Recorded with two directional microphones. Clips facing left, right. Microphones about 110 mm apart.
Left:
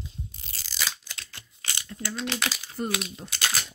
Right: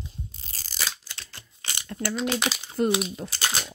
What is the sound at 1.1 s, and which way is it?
Scissors, 30° right (ahead or behind).